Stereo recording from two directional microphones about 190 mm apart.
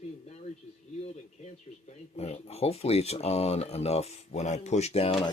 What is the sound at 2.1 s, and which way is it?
Speech, 35° left (ahead or behind).